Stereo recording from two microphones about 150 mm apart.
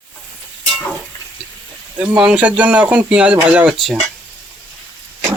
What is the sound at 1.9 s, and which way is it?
Speech, 10° right (ahead or behind).